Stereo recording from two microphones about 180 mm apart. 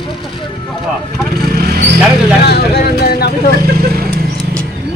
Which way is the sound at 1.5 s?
60° right (ahead or behind).